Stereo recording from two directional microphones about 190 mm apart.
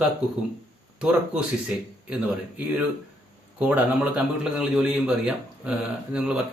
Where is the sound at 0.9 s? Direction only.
5° right (ahead or behind).